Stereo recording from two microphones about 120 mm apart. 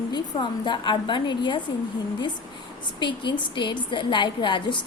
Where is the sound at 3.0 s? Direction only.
40° left (ahead or behind).